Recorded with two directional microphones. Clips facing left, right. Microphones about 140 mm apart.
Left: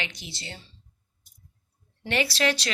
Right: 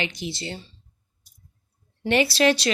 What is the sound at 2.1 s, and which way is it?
Speech, 20° right (ahead or behind).